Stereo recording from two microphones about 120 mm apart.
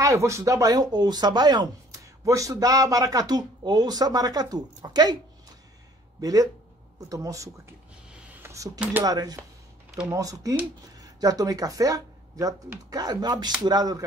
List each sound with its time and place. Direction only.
0.0 s speech: 25° right (ahead or behind)
6.2 s speech: 30° right (ahead or behind)
8.3 s a sound: 20° right (ahead or behind)
8.7 s speech: 10° right (ahead or behind)
9.0 s speech: 30° right (ahead or behind)
9.8 s a sound: 5° right (ahead or behind)
10.1 s speech: 30° right (ahead or behind)